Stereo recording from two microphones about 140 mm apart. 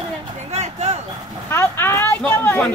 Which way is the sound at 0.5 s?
50° right (ahead or behind).